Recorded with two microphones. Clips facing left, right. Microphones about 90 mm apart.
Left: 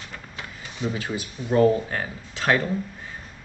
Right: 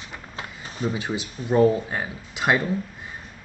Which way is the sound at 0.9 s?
20° right (ahead or behind).